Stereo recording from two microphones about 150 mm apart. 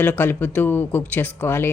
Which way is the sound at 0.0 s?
10° left (ahead or behind).